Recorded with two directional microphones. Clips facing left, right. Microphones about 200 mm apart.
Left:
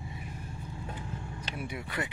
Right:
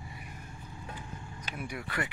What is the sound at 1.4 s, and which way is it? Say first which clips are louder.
Speech: right 1 dB; 20° left (ahead or behind).